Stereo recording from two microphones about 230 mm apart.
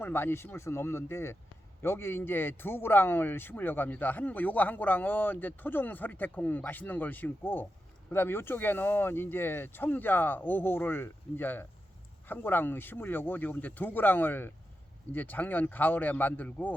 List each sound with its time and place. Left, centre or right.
0.0 s speech: centre